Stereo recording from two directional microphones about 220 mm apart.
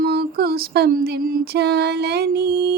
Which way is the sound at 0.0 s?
45° right (ahead or behind).